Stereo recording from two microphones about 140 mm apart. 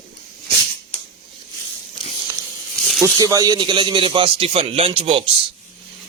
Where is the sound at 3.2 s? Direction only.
25° right (ahead or behind).